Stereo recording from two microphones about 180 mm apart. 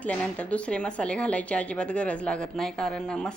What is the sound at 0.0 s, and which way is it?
Speech, 5° left (ahead or behind).